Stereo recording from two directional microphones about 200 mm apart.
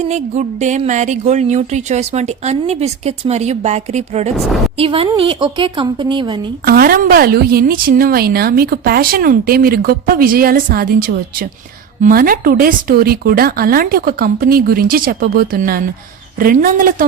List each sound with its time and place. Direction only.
0.0 s a woman's voice: 35° right (ahead or behind)
6.7 s a woman's voice: 50° right (ahead or behind)